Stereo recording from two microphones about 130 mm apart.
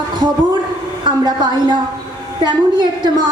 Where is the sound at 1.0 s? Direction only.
35° right (ahead or behind).